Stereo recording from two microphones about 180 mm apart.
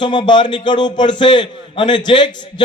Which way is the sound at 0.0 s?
25° left (ahead or behind).